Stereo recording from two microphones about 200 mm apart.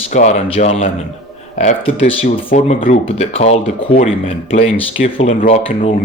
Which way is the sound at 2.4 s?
40° left (ahead or behind).